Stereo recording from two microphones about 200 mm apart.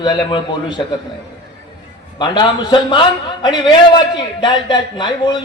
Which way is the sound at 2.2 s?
20° left (ahead or behind).